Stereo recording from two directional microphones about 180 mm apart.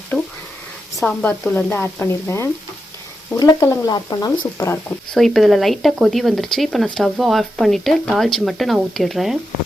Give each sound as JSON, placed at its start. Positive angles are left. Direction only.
{"t": 0.1, "sound": "speech", "side_deg": 0}
{"t": 5.1, "sound": "speech", "side_deg": 0}